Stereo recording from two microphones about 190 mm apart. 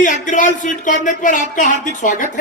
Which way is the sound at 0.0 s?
40° left (ahead or behind).